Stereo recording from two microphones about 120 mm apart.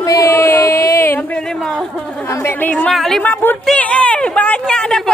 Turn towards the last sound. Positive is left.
turn(degrees=5)  # may be behind; listen again after turning